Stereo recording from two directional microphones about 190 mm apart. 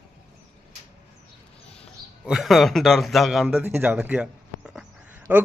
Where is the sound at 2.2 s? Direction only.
Centre (ahead or behind).